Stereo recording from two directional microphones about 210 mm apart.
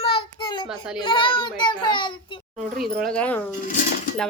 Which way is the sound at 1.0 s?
25° left (ahead or behind).